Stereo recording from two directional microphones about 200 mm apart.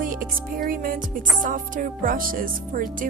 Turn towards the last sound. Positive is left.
turn(degrees=-45)  # may be behind; listen again after turning